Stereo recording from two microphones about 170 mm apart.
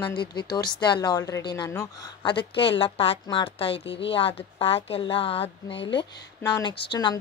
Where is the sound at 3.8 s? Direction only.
90° left.